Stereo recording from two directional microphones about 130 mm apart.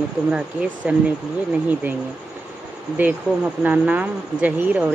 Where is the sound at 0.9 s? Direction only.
10° right (ahead or behind).